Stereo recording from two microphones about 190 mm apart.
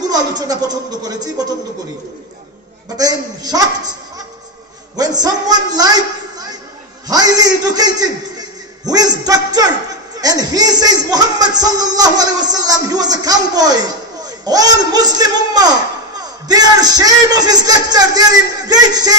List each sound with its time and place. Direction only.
0.4 s speech: 20° right (ahead or behind)
3.0 s a man's voice: 20° right (ahead or behind)
4.9 s a sound: 20° right (ahead or behind)
8.8 s a man's voice: 20° right (ahead or behind)